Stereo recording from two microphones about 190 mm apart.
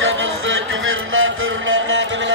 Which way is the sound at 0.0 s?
90° right.